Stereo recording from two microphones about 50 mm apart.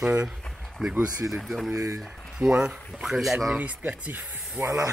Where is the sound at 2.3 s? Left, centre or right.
Centre.